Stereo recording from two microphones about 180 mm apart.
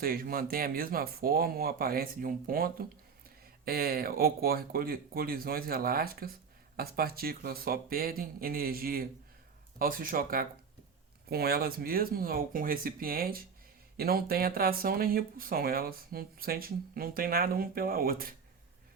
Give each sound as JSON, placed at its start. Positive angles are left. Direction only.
{"t": 0.0, "sound": "speech", "side_deg": -55}